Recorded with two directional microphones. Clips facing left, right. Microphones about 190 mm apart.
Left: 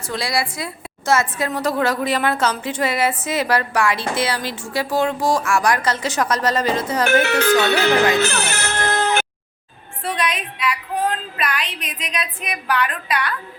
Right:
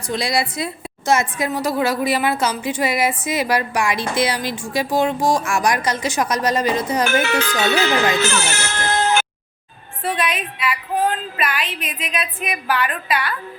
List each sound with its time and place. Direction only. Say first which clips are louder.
0.1 s a woman's voice: right 2 dB; 20° right (ahead or behind)
7.0 s speech: left 5 dB; 65° left (ahead or behind)
10.0 s a woman's voice: right 1 dB; 5° right (ahead or behind)